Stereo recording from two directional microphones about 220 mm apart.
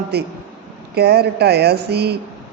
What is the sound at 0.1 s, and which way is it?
Speech, 45° right (ahead or behind).